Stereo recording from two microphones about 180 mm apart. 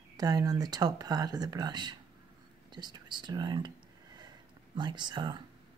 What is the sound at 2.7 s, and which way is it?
Whispering, 25° right (ahead or behind).